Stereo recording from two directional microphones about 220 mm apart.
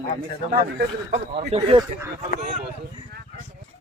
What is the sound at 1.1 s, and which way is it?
Speech, 30° right (ahead or behind).